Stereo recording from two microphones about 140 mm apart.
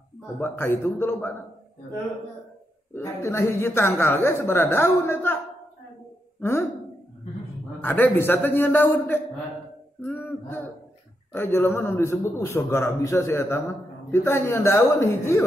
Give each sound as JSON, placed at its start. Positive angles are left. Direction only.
{"t": 0.4, "sound": "speech", "side_deg": 20}
{"t": 2.9, "sound": "speech", "side_deg": 20}
{"t": 7.8, "sound": "a man's voice", "side_deg": 15}